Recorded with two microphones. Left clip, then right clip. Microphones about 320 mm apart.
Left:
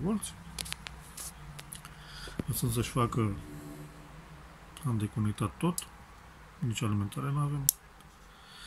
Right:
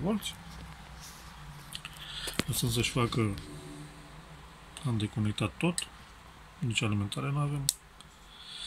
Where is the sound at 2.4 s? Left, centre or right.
Right.